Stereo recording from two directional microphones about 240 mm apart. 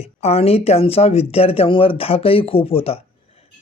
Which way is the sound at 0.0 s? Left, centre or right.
Left.